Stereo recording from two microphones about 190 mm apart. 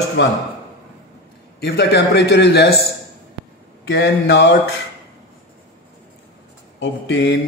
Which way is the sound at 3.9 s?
70° left (ahead or behind).